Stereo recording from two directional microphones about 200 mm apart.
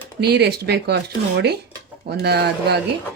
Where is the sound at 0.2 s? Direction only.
55° right (ahead or behind).